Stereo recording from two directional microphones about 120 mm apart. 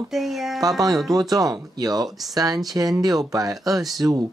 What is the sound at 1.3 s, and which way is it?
Speech, 30° right (ahead or behind).